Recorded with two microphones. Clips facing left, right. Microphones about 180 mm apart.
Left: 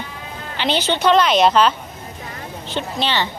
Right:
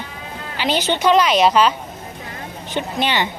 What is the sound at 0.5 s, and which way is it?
Speech, 10° right (ahead or behind).